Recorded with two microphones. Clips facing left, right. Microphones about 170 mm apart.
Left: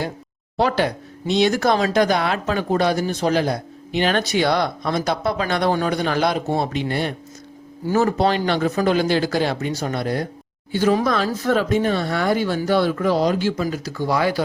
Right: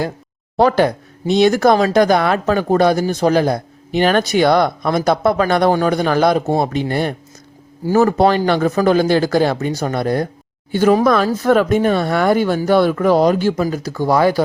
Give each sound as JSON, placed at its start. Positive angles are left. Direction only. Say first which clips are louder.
{"t": 0.5, "sound": "speech", "louder": "right 6 dB", "side_deg": -45}